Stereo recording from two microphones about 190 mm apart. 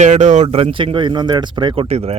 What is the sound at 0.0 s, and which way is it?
Speech, 40° right (ahead or behind).